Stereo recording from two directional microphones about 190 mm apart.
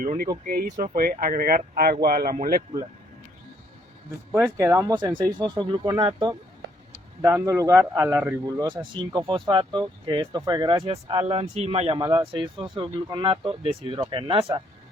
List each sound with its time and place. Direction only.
0.0 s speech: 45° right (ahead or behind)
4.5 s a man's voice: 15° right (ahead or behind)